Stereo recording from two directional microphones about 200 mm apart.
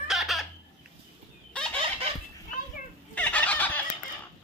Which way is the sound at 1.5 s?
5° left (ahead or behind).